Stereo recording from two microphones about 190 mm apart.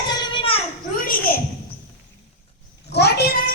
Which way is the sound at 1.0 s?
50° left (ahead or behind).